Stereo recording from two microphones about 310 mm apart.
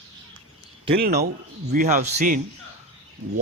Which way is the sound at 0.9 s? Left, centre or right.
Right.